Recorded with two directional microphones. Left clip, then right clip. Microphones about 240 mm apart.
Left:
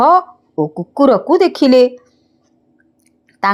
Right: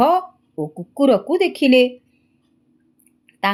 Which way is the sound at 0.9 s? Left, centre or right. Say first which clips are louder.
Left 5 dB; centre.